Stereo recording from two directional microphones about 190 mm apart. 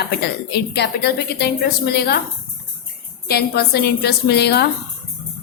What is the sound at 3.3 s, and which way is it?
A woman's voice, 55° left (ahead or behind).